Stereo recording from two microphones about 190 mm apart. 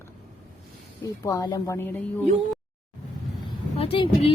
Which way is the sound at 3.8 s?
30° left (ahead or behind).